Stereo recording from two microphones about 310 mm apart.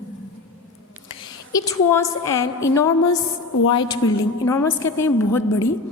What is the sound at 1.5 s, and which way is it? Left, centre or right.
Speech, centre.